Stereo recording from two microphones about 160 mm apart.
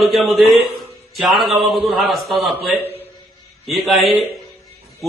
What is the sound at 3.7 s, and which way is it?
Speech, centre (ahead or behind).